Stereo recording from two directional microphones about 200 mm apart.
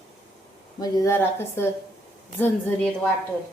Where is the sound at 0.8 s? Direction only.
15° left (ahead or behind).